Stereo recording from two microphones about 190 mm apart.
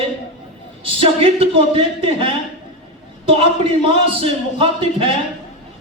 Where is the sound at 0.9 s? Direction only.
30° right (ahead or behind).